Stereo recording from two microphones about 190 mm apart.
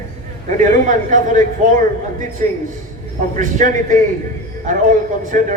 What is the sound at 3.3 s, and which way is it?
A man's voice, 40° right (ahead or behind).